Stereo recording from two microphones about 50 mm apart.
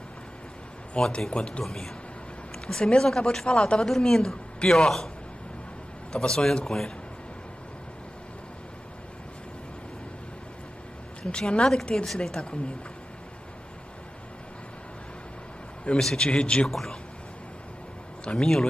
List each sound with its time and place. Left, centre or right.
0.9 s a man's voice: centre
1.6 s speech: centre
3.8 s speech: centre
6.1 s speech: centre
11.2 s speech: left
16.0 s speech: centre
16.6 s speech: centre
18.2 s speech: centre